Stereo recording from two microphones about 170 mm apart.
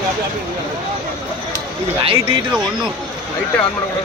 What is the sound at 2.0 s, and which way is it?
Speech, 30° right (ahead or behind).